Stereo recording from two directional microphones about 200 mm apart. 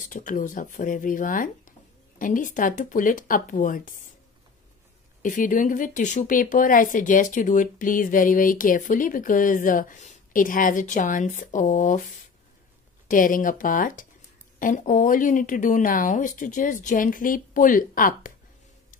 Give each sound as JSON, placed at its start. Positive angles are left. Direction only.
{"t": 0.0, "sound": "speech", "side_deg": 40}
{"t": 5.2, "sound": "speech", "side_deg": 40}
{"t": 13.1, "sound": "speech", "side_deg": 40}